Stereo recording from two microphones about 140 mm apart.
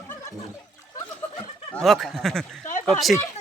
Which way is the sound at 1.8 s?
Centre (ahead or behind).